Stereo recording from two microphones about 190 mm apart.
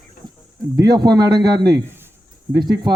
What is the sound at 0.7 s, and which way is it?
Speech, 20° right (ahead or behind).